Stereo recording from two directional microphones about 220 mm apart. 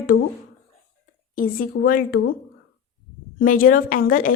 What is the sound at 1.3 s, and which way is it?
Speech, 40° left (ahead or behind).